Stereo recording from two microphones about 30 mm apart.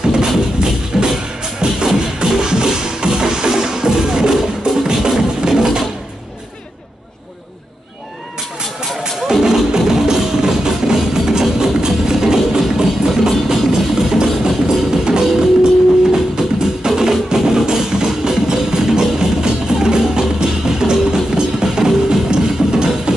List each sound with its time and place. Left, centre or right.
0.0 s music: right
5.6 s drawer open or close: right
9.3 s music: centre